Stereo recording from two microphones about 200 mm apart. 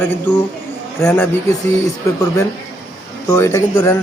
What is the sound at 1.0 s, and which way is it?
Speech, 10° left (ahead or behind).